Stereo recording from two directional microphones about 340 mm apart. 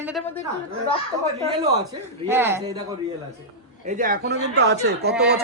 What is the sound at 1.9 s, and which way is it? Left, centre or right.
Speech, centre.